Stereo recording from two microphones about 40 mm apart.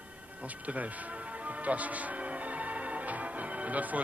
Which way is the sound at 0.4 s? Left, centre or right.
Right.